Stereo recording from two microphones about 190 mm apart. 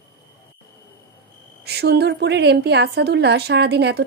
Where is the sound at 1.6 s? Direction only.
60° right (ahead or behind).